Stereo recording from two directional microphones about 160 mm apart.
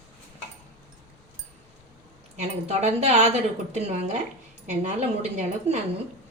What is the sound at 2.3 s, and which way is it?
A woman's voice, 45° right (ahead or behind).